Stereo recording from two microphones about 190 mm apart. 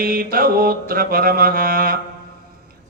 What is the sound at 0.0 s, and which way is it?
Mantra, 50° right (ahead or behind).